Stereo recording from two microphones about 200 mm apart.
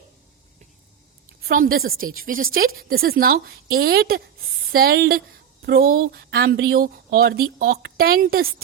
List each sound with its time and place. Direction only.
1.5 s a woman's voice: 45° right (ahead or behind)